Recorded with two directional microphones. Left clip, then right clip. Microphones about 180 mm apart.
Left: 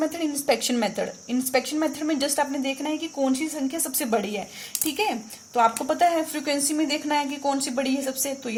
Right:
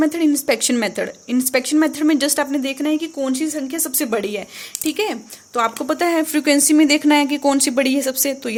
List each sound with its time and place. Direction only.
0.0 s a woman's voice: 35° right (ahead or behind)